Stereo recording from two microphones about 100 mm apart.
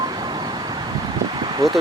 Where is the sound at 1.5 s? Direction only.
45° right (ahead or behind).